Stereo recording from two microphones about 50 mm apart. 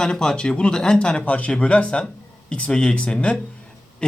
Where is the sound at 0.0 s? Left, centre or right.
Centre.